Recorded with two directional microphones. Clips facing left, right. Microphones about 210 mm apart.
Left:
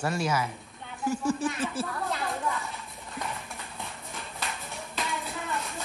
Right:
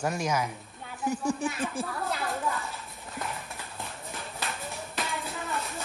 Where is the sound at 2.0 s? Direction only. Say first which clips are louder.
Even; centre (ahead or behind).